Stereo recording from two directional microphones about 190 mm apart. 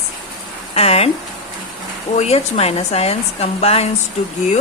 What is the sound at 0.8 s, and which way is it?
Speech, 30° left (ahead or behind).